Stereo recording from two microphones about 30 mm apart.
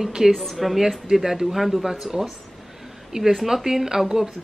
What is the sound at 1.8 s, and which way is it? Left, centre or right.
Speech, centre.